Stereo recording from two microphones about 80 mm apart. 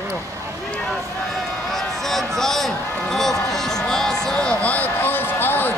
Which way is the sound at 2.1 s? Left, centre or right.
Centre.